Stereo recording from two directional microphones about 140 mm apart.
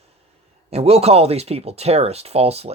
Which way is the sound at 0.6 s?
45° right (ahead or behind).